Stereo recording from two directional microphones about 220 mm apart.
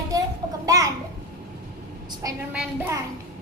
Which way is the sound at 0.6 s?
15° right (ahead or behind).